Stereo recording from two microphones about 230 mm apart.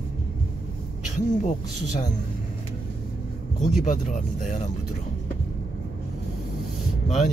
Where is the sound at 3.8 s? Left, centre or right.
Left.